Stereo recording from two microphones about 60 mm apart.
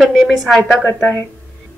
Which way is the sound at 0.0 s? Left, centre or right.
Centre.